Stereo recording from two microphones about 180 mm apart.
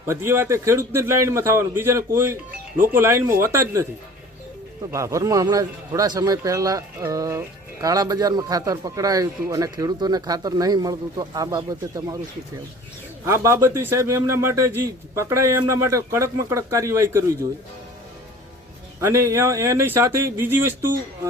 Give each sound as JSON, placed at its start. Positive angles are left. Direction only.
{"t": 0.0, "sound": "a man's voice", "side_deg": -15}
{"t": 4.9, "sound": "speech", "side_deg": -15}
{"t": 13.2, "sound": "a man's voice", "side_deg": -15}
{"t": 18.9, "sound": "a man's voice", "side_deg": -15}